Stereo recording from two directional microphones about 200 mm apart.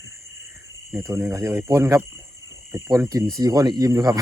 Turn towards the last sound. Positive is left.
turn(degrees=-20)  # may be behind; listen again after turning